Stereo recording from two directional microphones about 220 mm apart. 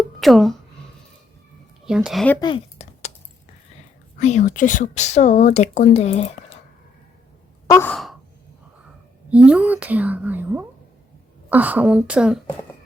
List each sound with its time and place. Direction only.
0.2 s speech: centre (ahead or behind)
1.9 s speech: 5° right (ahead or behind)
2.4 s a sound: 25° left (ahead or behind)
4.2 s speech: 30° left (ahead or behind)
7.7 s sigh: 10° left (ahead or behind)
9.3 s a woman's voice: 5° right (ahead or behind)